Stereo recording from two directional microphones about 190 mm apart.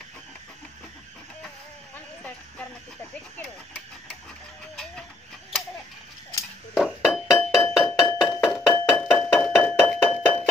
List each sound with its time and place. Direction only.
6.7 s music: centre (ahead or behind)
9.3 s a sound: 5° left (ahead or behind)
9.8 s music: 5° left (ahead or behind)